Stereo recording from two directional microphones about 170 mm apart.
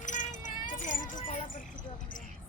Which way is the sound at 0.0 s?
45° left (ahead or behind).